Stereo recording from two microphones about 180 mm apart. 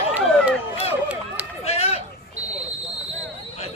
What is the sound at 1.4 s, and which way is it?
Run, 5° right (ahead or behind).